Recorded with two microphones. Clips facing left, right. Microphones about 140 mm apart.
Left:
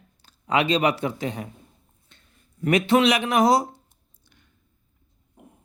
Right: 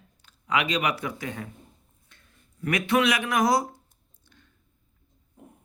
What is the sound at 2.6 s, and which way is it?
Speech, 25° left (ahead or behind).